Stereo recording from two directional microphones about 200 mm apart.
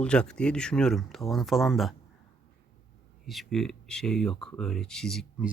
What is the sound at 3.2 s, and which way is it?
A man's voice, centre (ahead or behind).